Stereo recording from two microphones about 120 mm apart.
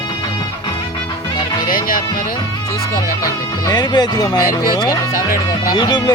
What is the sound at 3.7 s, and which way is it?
Speech, 35° left (ahead or behind).